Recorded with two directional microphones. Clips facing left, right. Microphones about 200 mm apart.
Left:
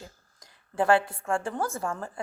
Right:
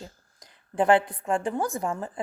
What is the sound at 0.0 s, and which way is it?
A woman's voice, 20° right (ahead or behind).